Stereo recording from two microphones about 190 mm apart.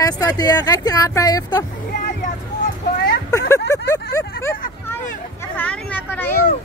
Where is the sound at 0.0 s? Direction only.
20° left (ahead or behind).